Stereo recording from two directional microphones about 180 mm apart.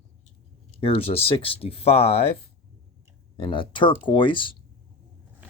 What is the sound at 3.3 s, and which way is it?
Speech, 25° left (ahead or behind).